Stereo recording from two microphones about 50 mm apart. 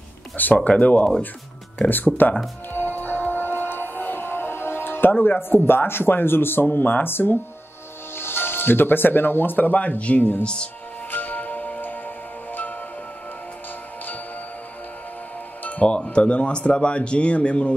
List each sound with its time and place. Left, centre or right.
0.7 s speech: left
2.7 s music: left
5.5 s speech: left
10.4 s speech: centre
11.1 s music: left
15.6 s speech: left